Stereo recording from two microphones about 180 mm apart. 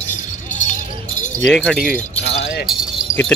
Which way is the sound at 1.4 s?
5° left (ahead or behind).